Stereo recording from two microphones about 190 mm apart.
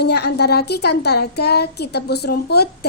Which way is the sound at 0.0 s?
60° left (ahead or behind).